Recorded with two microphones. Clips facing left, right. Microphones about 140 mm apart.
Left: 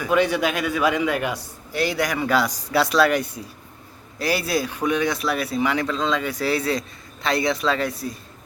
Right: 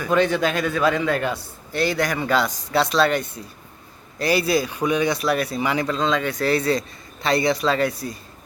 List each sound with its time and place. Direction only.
0.0 s a man's voice: 10° left (ahead or behind)
2.7 s a woman's voice: 25° right (ahead or behind)
3.4 s a man's voice: 10° left (ahead or behind)